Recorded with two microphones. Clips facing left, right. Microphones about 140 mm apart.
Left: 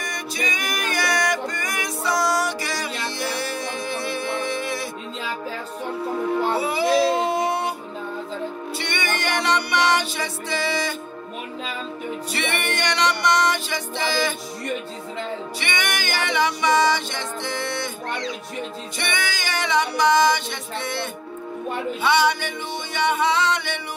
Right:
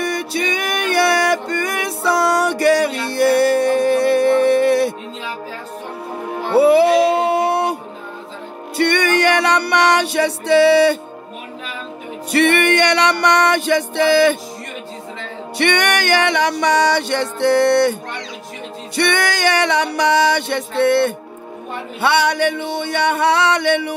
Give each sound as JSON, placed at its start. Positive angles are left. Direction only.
{"t": 0.0, "sound": "music", "side_deg": -65}
{"t": 6.5, "sound": "music", "side_deg": -65}
{"t": 8.7, "sound": "music", "side_deg": -65}
{"t": 12.3, "sound": "music", "side_deg": -65}
{"t": 15.5, "sound": "music", "side_deg": -65}
{"t": 18.9, "sound": "music", "side_deg": -65}